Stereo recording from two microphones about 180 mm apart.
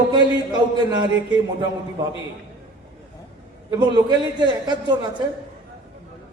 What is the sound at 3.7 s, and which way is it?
A man's voice, 20° right (ahead or behind).